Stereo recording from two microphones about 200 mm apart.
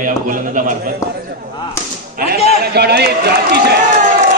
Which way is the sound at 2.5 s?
55° right (ahead or behind).